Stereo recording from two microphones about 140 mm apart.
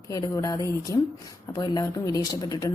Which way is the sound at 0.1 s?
25° left (ahead or behind).